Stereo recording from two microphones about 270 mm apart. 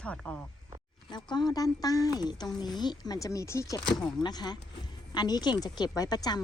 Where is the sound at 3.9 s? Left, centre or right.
Centre.